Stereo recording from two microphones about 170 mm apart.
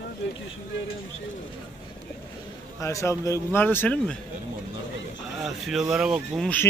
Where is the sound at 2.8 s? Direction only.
15° left (ahead or behind).